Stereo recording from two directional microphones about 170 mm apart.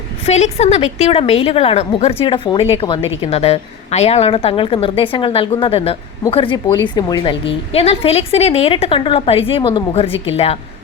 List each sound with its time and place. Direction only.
0.3 s a woman's voice: 40° left (ahead or behind)